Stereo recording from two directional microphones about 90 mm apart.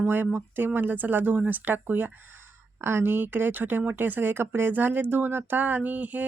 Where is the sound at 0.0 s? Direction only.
20° right (ahead or behind).